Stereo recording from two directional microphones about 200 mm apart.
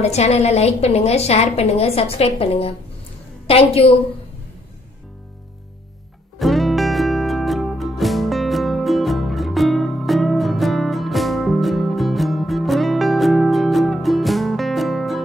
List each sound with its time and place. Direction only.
0.0 s a woman's voice: 30° left (ahead or behind)
6.3 s music: centre (ahead or behind)